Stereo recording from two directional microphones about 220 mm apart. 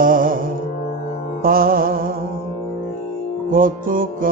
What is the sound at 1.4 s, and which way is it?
Music, 40° right (ahead or behind).